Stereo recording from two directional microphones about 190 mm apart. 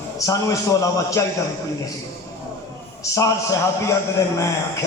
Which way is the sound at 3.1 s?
15° left (ahead or behind).